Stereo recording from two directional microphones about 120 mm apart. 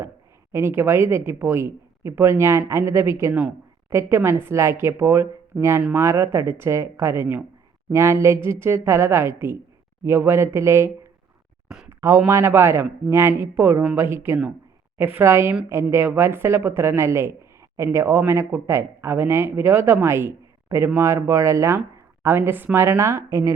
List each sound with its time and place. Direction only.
0.5 s speech: 20° right (ahead or behind)